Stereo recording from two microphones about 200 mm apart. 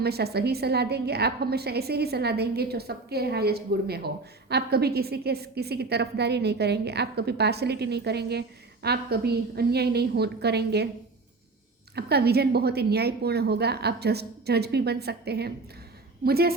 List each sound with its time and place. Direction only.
0.0 s a woman's voice: 55° right (ahead or behind)
11.9 s a woman's voice: 55° right (ahead or behind)